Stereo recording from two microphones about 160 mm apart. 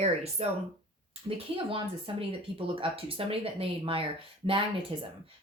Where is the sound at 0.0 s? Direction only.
40° right (ahead or behind).